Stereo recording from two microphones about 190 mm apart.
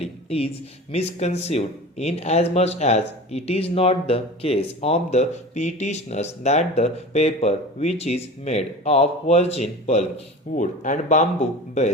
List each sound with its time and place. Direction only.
0.0 s speech: 30° left (ahead or behind)